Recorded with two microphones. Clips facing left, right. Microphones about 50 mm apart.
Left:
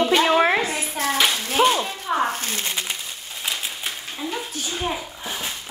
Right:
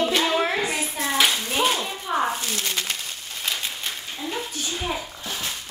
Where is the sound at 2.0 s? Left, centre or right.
Centre.